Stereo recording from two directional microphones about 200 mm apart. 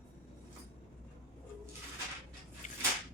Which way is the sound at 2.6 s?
35° left (ahead or behind).